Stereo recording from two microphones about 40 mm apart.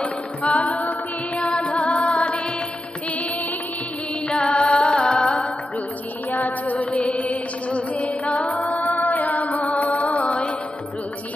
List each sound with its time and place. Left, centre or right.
0.0 s music: left
4.3 s music: left
6.3 s music: left